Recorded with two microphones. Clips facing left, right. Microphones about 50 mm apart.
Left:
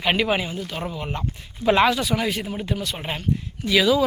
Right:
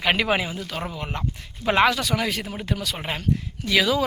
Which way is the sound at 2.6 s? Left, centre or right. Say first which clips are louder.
Left 1 dB; right.